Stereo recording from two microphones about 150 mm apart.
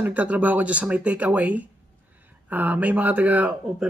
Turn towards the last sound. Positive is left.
turn(degrees=-10)  # may be behind; listen again after turning